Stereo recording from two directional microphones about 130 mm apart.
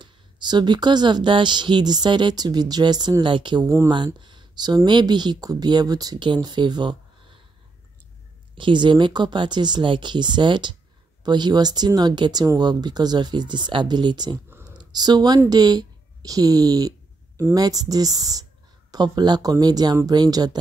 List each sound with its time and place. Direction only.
0.0 s speech: 35° right (ahead or behind)
3.6 s speech: 25° right (ahead or behind)
3.9 s speech: 35° right (ahead or behind)
8.5 s speech: 40° right (ahead or behind)